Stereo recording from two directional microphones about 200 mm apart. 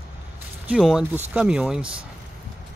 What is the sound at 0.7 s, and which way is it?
Speech, 5° right (ahead or behind).